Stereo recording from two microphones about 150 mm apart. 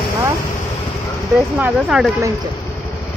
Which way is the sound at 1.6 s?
5° right (ahead or behind).